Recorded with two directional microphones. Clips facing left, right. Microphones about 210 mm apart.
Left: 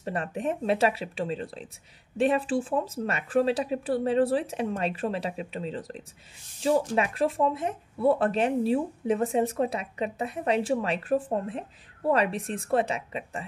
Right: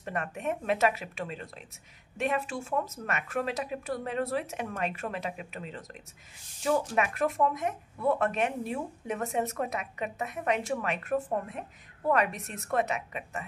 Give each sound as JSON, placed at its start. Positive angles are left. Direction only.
{"t": 0.0, "sound": "speech", "side_deg": 30}